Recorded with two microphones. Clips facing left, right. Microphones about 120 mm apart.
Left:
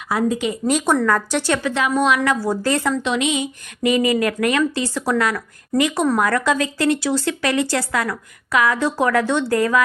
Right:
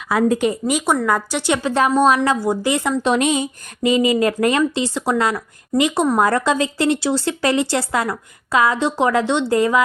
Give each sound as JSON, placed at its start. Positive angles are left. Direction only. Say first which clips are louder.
{"t": 0.7, "sound": "speech", "louder": "left 4 dB", "side_deg": -10}
{"t": 1.6, "sound": "speech", "louder": "right 7 dB", "side_deg": -35}
{"t": 2.6, "sound": "speech", "louder": "left 2 dB", "side_deg": -15}
{"t": 3.0, "sound": "speech", "louder": "right 3 dB", "side_deg": -45}
{"t": 3.9, "sound": "speech", "louder": "right 3 dB", "side_deg": -25}